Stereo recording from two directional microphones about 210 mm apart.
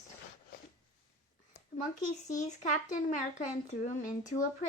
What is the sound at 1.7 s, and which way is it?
Speech, 40° left (ahead or behind).